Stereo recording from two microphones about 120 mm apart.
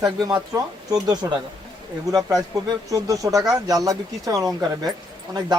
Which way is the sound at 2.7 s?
30° right (ahead or behind).